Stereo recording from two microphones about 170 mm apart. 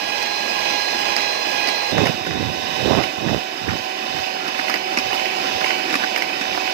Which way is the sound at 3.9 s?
70° right (ahead or behind).